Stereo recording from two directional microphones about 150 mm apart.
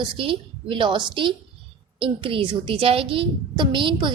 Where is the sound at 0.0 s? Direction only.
35° right (ahead or behind).